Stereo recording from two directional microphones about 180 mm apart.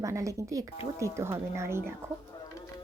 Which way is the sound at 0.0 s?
15° right (ahead or behind).